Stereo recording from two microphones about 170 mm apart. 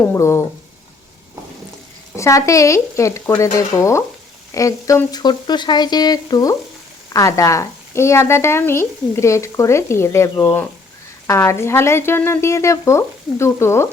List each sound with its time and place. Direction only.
0.0 s a woman's voice: 15° left (ahead or behind)
2.1 s a woman's voice: 20° left (ahead or behind)